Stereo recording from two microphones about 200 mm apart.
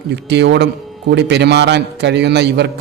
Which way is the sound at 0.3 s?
60° right (ahead or behind).